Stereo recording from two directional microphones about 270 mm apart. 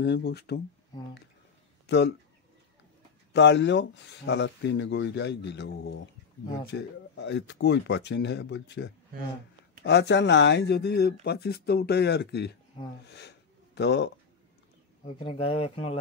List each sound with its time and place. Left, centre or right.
0.0 s speech: left
1.9 s speech: left
3.3 s speech: left
13.0 s a sound: left
15.0 s speech: left